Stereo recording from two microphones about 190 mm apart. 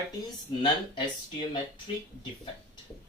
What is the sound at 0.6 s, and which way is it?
Speech, 25° left (ahead or behind).